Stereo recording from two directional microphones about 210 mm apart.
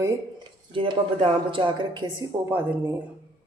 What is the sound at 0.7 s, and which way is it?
Speech, 25° right (ahead or behind).